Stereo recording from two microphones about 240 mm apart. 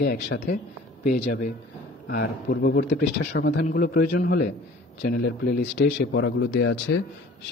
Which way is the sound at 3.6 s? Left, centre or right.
Left.